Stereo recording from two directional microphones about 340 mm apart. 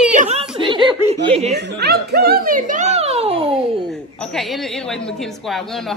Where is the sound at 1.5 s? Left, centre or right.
Right.